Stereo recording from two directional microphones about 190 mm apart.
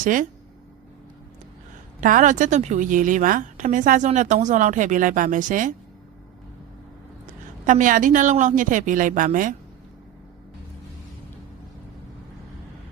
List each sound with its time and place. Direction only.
0.0 s a woman's voice: 45° right (ahead or behind)
2.0 s a woman's voice: 45° right (ahead or behind)
7.7 s a woman's voice: 45° right (ahead or behind)